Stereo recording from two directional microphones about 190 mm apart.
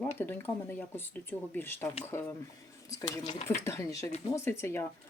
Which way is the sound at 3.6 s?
15° left (ahead or behind).